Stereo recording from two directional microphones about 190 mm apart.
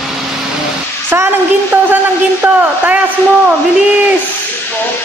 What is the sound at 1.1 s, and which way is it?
Speech, 10° right (ahead or behind).